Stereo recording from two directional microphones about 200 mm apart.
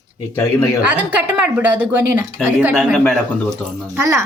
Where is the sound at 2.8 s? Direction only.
Centre (ahead or behind).